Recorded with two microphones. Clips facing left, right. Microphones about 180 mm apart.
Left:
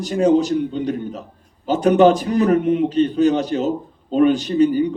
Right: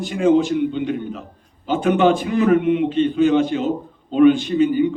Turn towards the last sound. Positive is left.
turn(degrees=40)  # may be behind; listen again after turning